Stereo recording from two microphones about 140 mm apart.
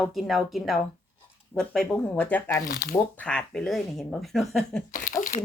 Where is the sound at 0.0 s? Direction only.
Centre (ahead or behind).